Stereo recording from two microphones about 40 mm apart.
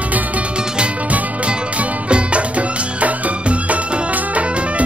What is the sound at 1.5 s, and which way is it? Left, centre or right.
Music, right.